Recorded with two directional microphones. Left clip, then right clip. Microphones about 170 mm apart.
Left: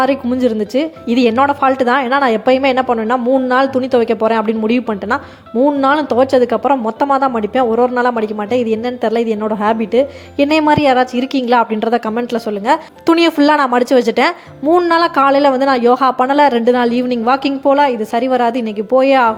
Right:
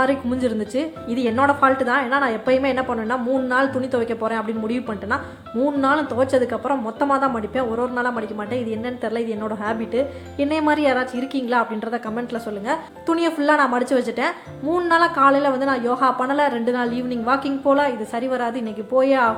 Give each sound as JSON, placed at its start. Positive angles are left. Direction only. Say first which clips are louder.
{"t": 0.0, "sound": "a woman's voice", "louder": "left 6 dB", "side_deg": 35}